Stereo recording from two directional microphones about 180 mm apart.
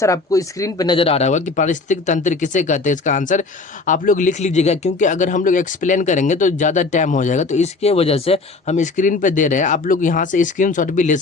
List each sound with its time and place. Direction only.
0.0 s a man's voice: 20° left (ahead or behind); by 11.2 s 45° left (ahead or behind)